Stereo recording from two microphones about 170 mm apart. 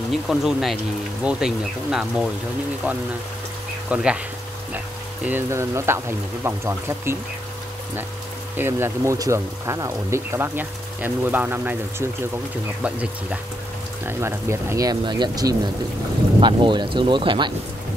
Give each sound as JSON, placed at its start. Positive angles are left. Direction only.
{"t": 0.1, "sound": "speech", "side_deg": 0}
{"t": 3.9, "sound": "speech", "side_deg": -5}
{"t": 5.2, "sound": "speech", "side_deg": -15}
{"t": 8.5, "sound": "speech", "side_deg": -15}